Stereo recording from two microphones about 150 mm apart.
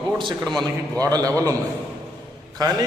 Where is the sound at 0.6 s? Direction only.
25° right (ahead or behind).